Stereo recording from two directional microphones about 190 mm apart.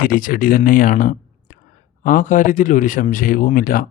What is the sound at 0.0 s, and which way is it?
Speech, 50° left (ahead or behind).